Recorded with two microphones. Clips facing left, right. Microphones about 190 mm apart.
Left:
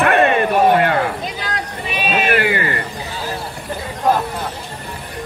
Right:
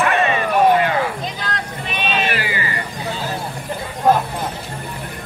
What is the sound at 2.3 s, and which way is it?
Music, 55° left (ahead or behind).